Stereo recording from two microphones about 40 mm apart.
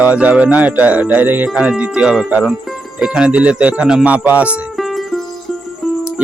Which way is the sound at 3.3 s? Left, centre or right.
Right.